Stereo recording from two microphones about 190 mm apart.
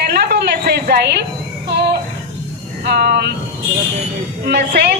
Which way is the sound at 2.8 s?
55° right (ahead or behind).